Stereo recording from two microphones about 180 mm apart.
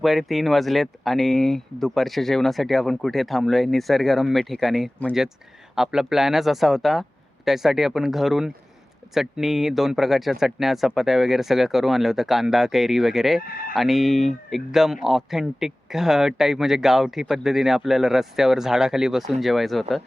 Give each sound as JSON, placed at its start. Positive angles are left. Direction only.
{"t": 0.0, "sound": "speech", "side_deg": 0}
{"t": 13.4, "sound": "speech", "side_deg": 55}
{"t": 13.7, "sound": "speech", "side_deg": 0}